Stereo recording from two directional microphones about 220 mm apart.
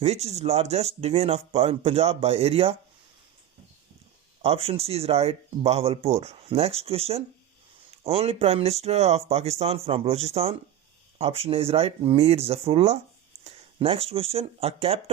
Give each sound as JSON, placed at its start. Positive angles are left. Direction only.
{"t": 0.0, "sound": "speech", "side_deg": -30}
{"t": 4.4, "sound": "speech", "side_deg": -25}